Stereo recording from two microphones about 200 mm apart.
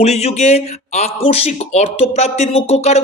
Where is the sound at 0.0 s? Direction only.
30° left (ahead or behind).